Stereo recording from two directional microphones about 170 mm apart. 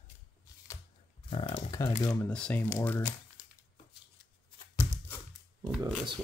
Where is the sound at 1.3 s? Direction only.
35° left (ahead or behind).